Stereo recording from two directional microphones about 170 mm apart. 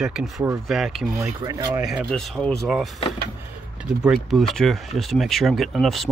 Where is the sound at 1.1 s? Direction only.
20° right (ahead or behind).